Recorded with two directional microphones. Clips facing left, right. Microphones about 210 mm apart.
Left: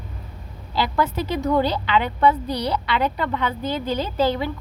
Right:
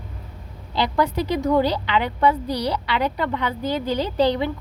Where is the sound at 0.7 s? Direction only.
20° right (ahead or behind).